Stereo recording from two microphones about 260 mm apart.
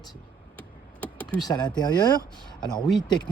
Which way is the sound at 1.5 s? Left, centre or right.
Centre.